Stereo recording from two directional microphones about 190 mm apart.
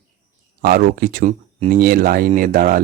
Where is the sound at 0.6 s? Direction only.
50° right (ahead or behind).